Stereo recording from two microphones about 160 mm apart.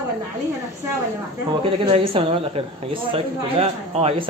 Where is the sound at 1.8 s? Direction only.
35° right (ahead or behind).